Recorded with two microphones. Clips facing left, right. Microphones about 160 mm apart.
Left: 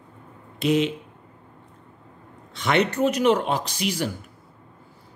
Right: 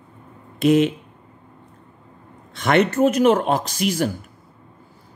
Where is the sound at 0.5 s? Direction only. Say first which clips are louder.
Right 5 dB; 50° right (ahead or behind).